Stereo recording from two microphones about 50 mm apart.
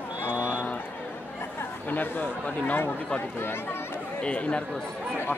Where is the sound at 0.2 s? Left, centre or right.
Left.